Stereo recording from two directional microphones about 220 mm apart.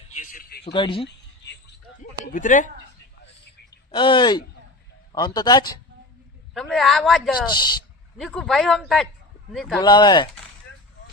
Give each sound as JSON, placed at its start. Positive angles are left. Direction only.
{"t": 0.2, "sound": "a sound", "side_deg": 40}
{"t": 0.6, "sound": "speech", "side_deg": 25}
{"t": 2.0, "sound": "speech", "side_deg": 35}
{"t": 3.9, "sound": "a man's voice", "side_deg": 20}
{"t": 6.5, "sound": "a man's voice", "side_deg": 0}
{"t": 7.4, "sound": "speech", "side_deg": 20}
{"t": 8.2, "sound": "a man's voice", "side_deg": 0}
{"t": 9.8, "sound": "speech", "side_deg": 20}